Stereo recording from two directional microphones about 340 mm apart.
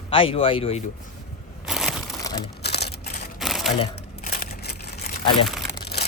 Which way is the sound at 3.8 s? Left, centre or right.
Left.